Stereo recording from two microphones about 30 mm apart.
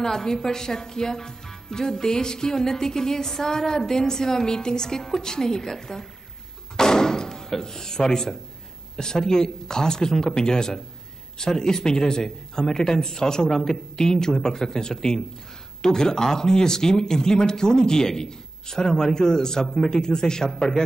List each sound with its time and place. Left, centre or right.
0.0 s speech: centre
6.8 s a sound: left
8.9 s speech: centre